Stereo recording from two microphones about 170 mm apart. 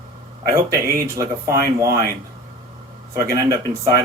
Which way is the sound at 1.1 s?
20° right (ahead or behind).